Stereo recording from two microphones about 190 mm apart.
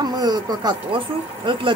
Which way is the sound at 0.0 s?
20° right (ahead or behind).